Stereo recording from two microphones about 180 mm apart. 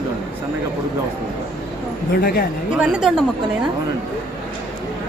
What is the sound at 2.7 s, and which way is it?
Speech, 5° right (ahead or behind).